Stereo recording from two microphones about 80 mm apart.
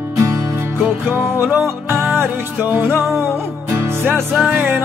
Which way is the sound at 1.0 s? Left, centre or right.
Right.